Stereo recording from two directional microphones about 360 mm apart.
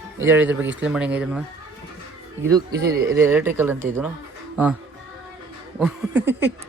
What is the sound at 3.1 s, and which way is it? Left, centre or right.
Speech, centre.